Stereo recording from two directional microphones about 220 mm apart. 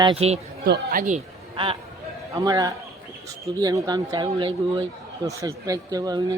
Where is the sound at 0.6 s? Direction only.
45° right (ahead or behind); by 1.7 s 30° right (ahead or behind).